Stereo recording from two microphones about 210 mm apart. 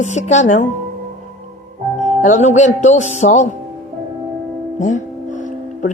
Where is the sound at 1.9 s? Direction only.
35° left (ahead or behind).